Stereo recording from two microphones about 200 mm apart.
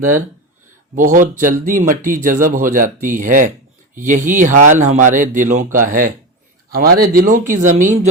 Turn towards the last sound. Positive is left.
turn(degrees=-40)  # may be behind; listen again after turning